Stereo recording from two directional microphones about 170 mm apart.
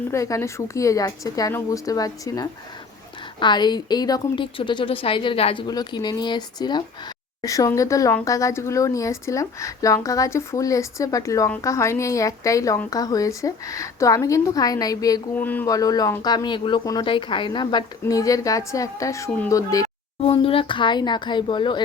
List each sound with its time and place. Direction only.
0.1 s a woman's voice: 15° left (ahead or behind)
15.4 s speech: 10° left (ahead or behind)
15.7 s a woman's voice: 20° left (ahead or behind)
20.2 s a woman's voice: 30° left (ahead or behind)